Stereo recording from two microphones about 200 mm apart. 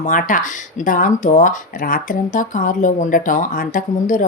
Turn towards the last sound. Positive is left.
turn(degrees=40)  # may be behind; listen again after turning